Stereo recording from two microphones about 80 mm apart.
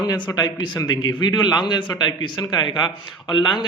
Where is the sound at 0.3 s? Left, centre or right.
Left.